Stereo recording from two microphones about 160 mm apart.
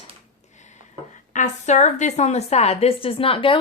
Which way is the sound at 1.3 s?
50° left (ahead or behind).